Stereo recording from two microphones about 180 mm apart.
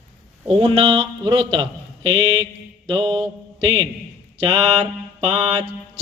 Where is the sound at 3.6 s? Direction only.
25° right (ahead or behind).